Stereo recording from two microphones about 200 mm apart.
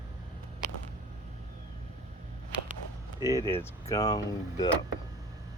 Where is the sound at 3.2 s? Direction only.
15° left (ahead or behind).